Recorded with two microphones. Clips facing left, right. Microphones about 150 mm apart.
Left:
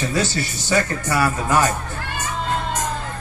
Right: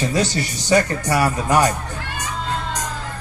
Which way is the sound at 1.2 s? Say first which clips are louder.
Right 1 dB; 40° right (ahead or behind).